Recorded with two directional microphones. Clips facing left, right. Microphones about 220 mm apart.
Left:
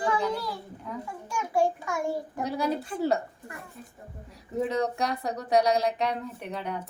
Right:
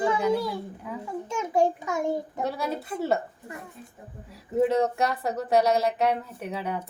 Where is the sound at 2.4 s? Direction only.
Centre (ahead or behind).